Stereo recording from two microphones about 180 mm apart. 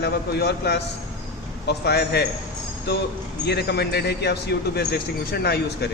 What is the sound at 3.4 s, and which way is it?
Speech, 65° left (ahead or behind).